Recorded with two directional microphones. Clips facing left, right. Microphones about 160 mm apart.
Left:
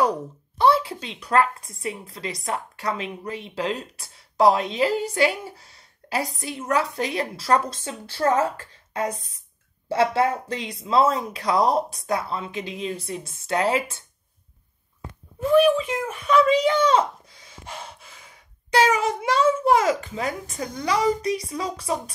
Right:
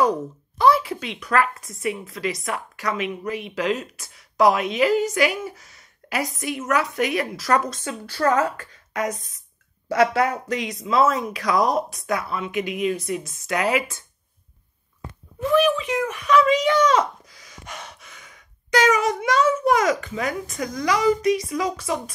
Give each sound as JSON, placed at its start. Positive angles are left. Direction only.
{"t": 0.6, "sound": "a sound", "side_deg": 30}
{"t": 1.2, "sound": "a woman's voice", "side_deg": 30}
{"t": 15.5, "sound": "speech", "side_deg": 35}